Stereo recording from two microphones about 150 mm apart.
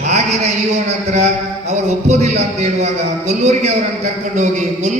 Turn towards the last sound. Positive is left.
turn(degrees=-50)  # may be behind; listen again after turning